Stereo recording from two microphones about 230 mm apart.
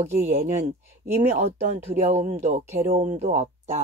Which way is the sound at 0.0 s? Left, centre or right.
Right.